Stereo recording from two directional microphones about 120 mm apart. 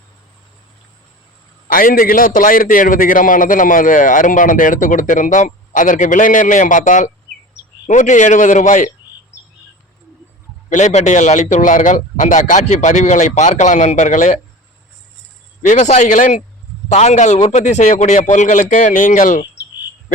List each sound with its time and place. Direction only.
2.8 s a man's voice: 90° left
10.7 s a man's voice: 90° left
15.6 s a man's voice: 80° left
16.9 s a man's voice: 70° left (ahead or behind); by 19.4 s 90° left